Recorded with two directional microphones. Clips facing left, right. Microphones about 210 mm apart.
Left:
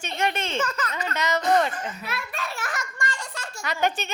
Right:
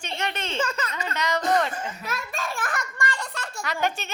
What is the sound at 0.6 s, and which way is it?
Speech, 25° right (ahead or behind).